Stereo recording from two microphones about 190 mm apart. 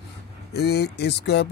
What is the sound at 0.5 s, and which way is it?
Speech, 60° left (ahead or behind).